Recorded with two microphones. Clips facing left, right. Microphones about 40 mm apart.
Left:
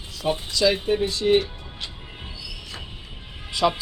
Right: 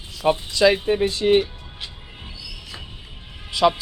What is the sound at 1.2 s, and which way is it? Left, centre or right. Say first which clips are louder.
Speech: right 2 dB; right.